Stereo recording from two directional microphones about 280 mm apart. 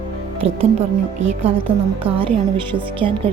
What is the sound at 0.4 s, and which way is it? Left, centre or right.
Speech, right.